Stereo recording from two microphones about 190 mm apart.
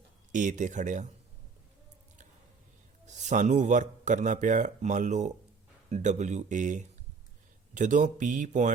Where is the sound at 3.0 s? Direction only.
40° right (ahead or behind).